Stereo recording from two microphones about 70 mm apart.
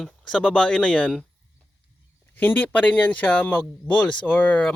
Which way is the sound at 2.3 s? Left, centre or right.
Left.